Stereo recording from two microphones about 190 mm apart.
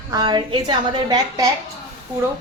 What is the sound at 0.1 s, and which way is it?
A woman's voice, 20° right (ahead or behind).